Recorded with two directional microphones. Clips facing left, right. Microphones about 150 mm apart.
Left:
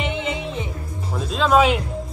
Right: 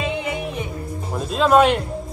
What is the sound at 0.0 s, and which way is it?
Music, 20° left (ahead or behind).